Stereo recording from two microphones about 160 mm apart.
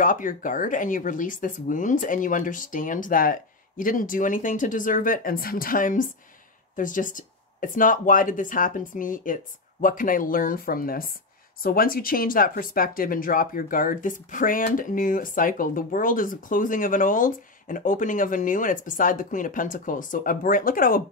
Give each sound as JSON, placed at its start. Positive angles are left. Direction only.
{"t": 0.0, "sound": "speech", "side_deg": 60}